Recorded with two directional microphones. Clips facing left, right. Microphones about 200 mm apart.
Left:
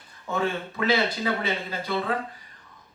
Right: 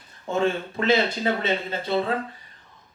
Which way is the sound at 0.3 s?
25° right (ahead or behind).